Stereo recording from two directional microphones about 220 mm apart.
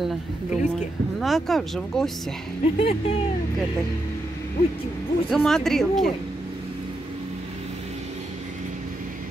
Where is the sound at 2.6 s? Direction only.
25° left (ahead or behind).